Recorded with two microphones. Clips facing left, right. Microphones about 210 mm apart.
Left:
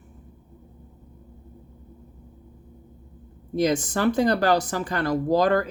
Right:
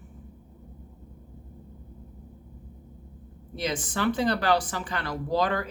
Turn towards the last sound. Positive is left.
turn(degrees=45)  # may be behind; listen again after turning